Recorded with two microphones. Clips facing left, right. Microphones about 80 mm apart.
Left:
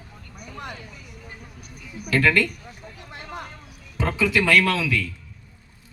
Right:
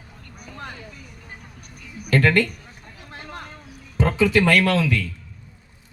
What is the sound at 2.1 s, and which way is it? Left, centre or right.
Speech, right.